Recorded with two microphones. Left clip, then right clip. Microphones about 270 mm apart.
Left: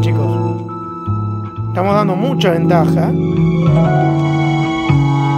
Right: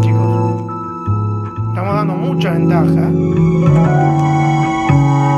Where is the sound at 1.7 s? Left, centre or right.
Left.